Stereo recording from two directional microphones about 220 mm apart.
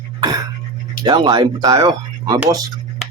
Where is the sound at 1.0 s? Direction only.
20° right (ahead or behind).